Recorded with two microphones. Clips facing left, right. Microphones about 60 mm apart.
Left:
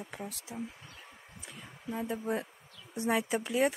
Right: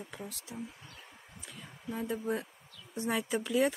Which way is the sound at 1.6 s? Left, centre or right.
Centre.